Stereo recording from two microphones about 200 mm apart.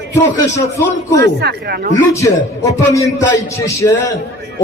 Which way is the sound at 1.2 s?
55° right (ahead or behind).